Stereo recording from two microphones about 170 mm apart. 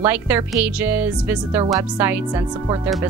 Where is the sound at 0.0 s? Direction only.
10° right (ahead or behind).